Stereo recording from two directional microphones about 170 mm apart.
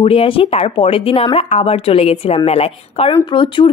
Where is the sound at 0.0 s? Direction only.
35° left (ahead or behind).